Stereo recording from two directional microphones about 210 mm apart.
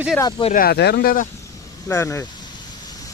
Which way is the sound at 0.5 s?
45° left (ahead or behind).